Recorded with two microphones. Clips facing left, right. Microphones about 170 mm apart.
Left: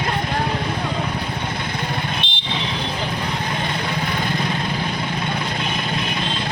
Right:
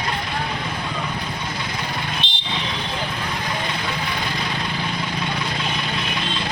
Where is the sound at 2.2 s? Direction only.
60° left (ahead or behind).